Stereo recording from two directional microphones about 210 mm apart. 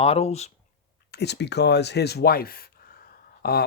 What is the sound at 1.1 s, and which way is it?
Speech, 50° left (ahead or behind).